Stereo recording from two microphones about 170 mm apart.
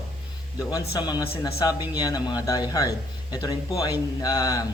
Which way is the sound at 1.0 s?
25° left (ahead or behind).